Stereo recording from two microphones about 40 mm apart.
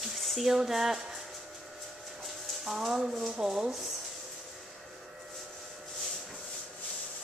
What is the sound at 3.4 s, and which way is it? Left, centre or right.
Speech, centre.